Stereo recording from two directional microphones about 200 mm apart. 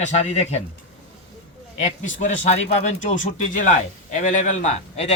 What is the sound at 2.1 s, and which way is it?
Speech, 35° left (ahead or behind).